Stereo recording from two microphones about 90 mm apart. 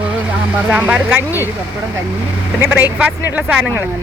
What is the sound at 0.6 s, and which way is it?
Speech, 10° right (ahead or behind).